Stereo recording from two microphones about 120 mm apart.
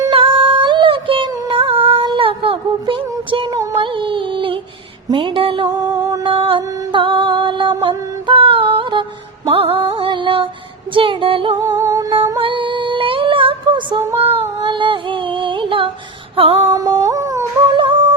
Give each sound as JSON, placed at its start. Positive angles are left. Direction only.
{"t": 0.1, "sound": "music", "side_deg": -50}
{"t": 3.6, "sound": "a sound", "side_deg": -30}
{"t": 3.9, "sound": "music", "side_deg": -45}
{"t": 5.6, "sound": "music", "side_deg": -30}
{"t": 6.2, "sound": "music", "side_deg": -45}
{"t": 11.6, "sound": "music", "side_deg": -25}
{"t": 12.4, "sound": "female singing", "side_deg": -45}
{"t": 14.2, "sound": "a sound", "side_deg": -50}
{"t": 16.3, "sound": "female singing", "side_deg": -50}
{"t": 16.7, "sound": "humming", "side_deg": -30}